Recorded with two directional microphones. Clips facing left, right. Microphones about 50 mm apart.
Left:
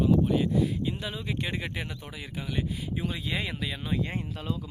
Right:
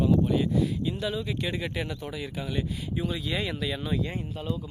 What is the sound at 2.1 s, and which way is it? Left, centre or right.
Speech, centre.